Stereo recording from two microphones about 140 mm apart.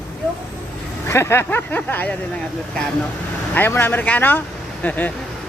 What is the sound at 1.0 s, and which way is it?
Speech, 20° left (ahead or behind).